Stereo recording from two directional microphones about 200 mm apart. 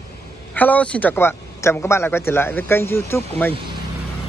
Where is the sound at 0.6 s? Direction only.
5° left (ahead or behind).